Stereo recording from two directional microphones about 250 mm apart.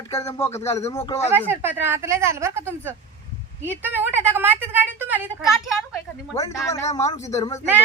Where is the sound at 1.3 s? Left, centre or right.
Centre.